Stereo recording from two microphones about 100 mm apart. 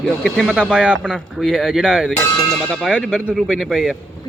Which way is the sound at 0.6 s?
10° right (ahead or behind).